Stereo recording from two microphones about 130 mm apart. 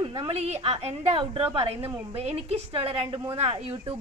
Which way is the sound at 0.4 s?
55° right (ahead or behind).